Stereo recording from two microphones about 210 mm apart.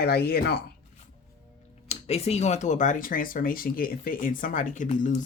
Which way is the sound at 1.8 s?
30° left (ahead or behind).